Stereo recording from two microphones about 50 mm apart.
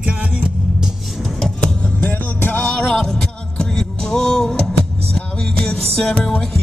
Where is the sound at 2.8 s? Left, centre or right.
Centre.